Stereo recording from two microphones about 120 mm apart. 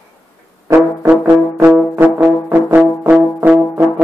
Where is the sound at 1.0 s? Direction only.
15° right (ahead or behind).